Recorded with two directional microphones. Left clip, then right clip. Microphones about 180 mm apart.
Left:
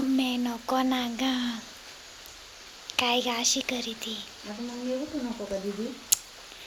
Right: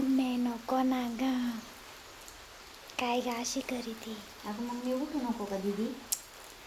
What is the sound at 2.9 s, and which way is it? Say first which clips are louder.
Speech: left 6 dB; centre (ahead or behind).